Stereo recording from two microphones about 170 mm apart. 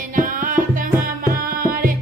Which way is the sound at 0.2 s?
55° right (ahead or behind).